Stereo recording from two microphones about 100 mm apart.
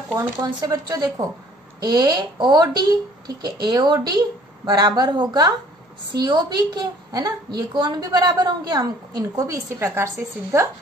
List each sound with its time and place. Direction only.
0.1 s a woman's voice: 35° right (ahead or behind)